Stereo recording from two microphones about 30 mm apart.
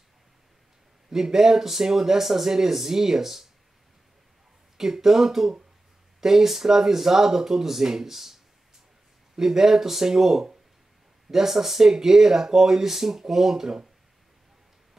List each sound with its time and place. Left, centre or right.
1.1 s speech: centre
4.7 s speech: centre
9.4 s speech: centre